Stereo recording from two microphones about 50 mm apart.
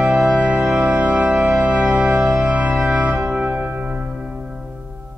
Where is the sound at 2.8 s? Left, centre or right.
Right.